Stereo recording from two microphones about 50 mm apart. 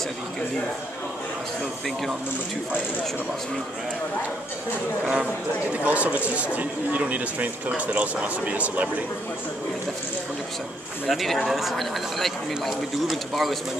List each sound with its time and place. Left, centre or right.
5.0 s speech: right
11.1 s speech: centre